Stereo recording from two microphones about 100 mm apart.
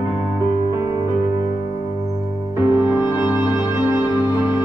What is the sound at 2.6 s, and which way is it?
Music, 25° right (ahead or behind).